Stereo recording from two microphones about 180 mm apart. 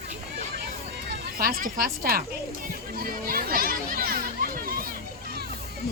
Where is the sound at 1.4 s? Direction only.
55° right (ahead or behind).